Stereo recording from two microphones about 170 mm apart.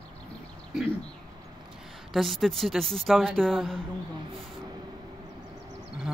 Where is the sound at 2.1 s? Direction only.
Centre (ahead or behind).